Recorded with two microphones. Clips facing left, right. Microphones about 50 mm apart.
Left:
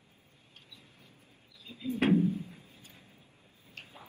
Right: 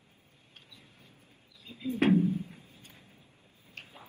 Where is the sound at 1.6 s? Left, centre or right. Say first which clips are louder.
Right 2 dB; right.